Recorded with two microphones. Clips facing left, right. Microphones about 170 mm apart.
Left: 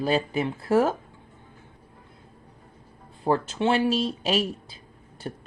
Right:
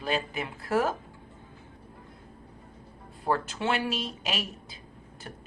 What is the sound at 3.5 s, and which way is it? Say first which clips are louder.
Speech: left 7 dB; 30° left (ahead or behind).